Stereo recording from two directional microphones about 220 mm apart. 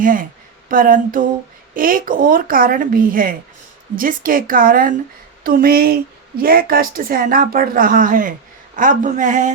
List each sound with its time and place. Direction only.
0.0 s a woman's voice: 40° right (ahead or behind)